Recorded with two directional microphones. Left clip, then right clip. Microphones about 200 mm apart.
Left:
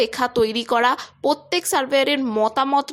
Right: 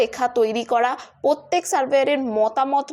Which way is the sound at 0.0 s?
35° left (ahead or behind).